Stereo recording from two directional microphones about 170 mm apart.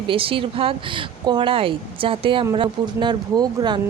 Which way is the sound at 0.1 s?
30° right (ahead or behind).